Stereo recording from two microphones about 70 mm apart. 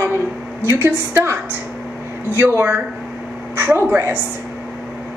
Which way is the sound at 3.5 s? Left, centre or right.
Right.